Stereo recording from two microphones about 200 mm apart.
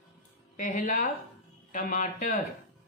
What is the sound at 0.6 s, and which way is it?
Speech, 40° left (ahead or behind).